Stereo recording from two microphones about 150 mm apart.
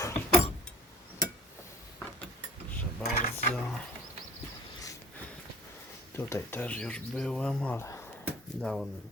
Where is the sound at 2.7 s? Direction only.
10° left (ahead or behind).